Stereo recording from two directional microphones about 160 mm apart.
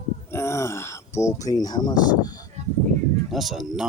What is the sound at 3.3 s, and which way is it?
Speech, centre (ahead or behind).